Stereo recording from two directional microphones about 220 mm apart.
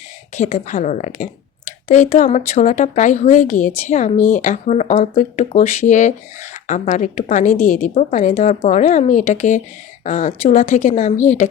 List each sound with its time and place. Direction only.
0.3 s speech: 30° left (ahead or behind)